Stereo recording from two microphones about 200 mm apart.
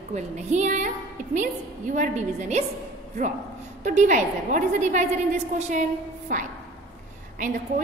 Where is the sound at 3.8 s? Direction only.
35° right (ahead or behind).